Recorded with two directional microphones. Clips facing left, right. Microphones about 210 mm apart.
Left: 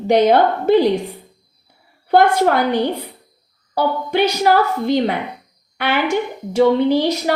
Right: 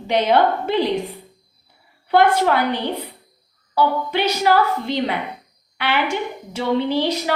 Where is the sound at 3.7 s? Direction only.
50° left (ahead or behind).